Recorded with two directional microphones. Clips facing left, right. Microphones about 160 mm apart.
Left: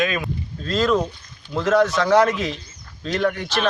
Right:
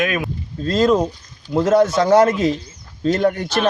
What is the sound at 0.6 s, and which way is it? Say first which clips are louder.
Speech: right 4 dB; 40° right (ahead or behind).